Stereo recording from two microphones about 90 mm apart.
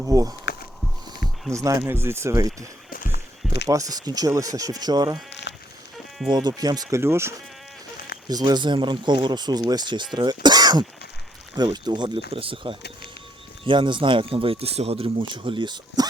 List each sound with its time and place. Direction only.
0.1 s speech: 40° right (ahead or behind)
1.5 s speech: 35° right (ahead or behind)
3.5 s speech: 40° right (ahead or behind)
6.6 s speech: 45° right (ahead or behind)
6.9 s speech: 30° right (ahead or behind)
8.3 s speech: 50° right (ahead or behind); by 12.7 s 90° right
13.7 s speech: 60° right (ahead or behind)